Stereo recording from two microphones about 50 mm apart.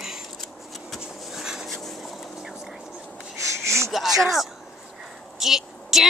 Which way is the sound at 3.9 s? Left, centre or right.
Centre.